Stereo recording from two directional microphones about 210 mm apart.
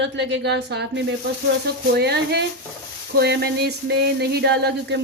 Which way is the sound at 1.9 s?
50° right (ahead or behind).